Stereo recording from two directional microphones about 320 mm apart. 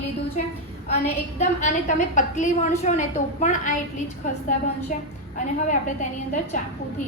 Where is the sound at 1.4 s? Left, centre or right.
Left.